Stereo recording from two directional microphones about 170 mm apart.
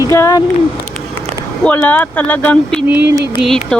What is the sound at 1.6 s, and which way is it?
Speech, 10° left (ahead or behind).